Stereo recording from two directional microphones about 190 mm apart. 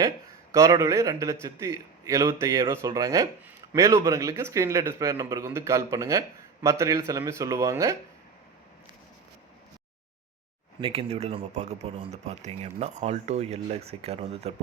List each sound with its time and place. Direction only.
0.5 s speech: 15° right (ahead or behind)
10.8 s speech: 30° right (ahead or behind)